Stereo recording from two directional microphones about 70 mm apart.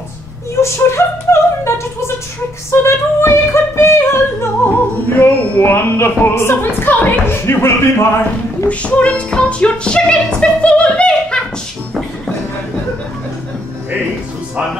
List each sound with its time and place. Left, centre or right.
0.6 s music: left
2.7 s female singing: left
5.2 s music: left
8.6 s music: centre